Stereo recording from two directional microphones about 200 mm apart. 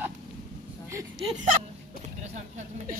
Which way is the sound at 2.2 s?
35° right (ahead or behind).